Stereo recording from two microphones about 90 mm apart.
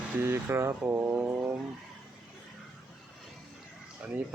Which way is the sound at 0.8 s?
20° right (ahead or behind).